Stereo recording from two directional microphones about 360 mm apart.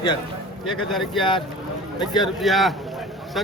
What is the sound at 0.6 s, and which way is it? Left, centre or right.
Speech, centre.